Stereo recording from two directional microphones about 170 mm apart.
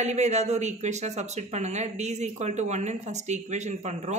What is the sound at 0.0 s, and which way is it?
Speech, 40° right (ahead or behind).